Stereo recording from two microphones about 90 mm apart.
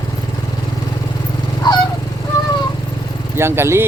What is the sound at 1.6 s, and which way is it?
Honk, 55° left (ahead or behind).